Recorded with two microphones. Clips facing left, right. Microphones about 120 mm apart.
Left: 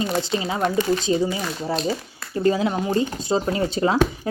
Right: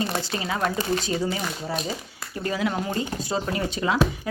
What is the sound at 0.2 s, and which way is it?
Speech, 25° left (ahead or behind).